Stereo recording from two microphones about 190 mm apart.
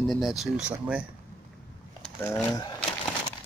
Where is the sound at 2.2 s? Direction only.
10° left (ahead or behind).